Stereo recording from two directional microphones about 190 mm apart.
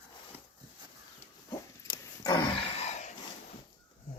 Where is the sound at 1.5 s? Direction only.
20° left (ahead or behind).